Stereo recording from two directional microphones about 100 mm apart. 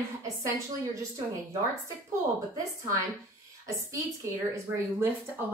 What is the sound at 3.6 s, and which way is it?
A woman's voice, 30° right (ahead or behind).